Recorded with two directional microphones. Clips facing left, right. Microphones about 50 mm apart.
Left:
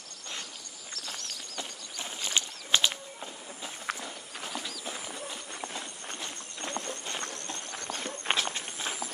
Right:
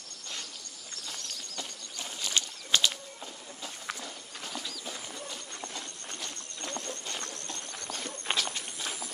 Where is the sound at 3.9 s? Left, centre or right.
Left.